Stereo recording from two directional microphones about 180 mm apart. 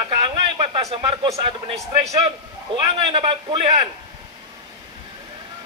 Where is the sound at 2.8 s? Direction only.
30° right (ahead or behind).